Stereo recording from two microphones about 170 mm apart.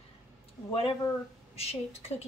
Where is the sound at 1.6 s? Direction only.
35° left (ahead or behind).